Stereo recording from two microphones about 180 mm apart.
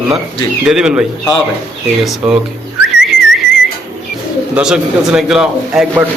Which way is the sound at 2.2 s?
5° right (ahead or behind).